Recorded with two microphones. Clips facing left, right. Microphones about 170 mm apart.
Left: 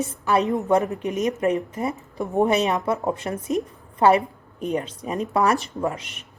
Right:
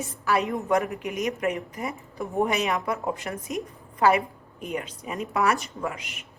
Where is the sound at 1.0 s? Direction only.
30° left (ahead or behind).